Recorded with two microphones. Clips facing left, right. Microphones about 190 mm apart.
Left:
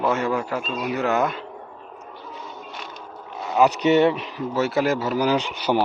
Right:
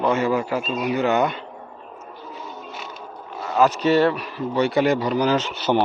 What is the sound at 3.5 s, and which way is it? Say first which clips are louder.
Speech: even; 15° left (ahead or behind).